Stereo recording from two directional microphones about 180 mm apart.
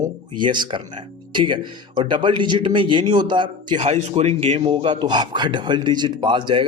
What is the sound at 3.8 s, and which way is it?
Speech, 35° right (ahead or behind).